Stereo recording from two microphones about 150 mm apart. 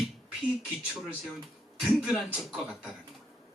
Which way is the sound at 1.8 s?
5° right (ahead or behind).